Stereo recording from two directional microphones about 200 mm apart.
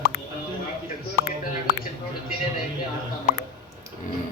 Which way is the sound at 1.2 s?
50° left (ahead or behind).